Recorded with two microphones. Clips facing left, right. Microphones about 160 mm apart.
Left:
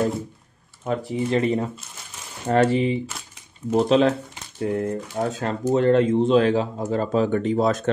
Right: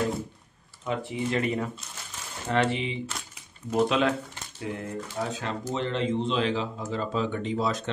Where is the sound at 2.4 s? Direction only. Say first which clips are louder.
Left 7 dB; 45° left (ahead or behind).